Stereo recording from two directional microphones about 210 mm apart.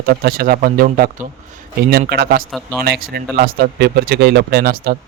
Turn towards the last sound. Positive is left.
turn(degrees=-45)  # may be behind; listen again after turning